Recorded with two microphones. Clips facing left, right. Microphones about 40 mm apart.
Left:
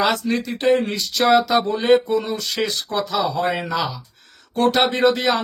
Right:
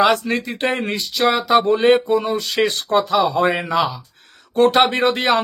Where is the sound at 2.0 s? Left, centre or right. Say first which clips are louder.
Right 3 dB; right.